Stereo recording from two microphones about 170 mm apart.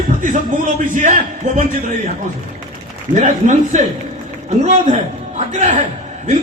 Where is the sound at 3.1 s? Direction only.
45° right (ahead or behind).